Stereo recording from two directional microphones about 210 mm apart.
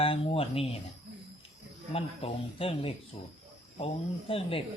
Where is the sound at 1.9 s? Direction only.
25° left (ahead or behind).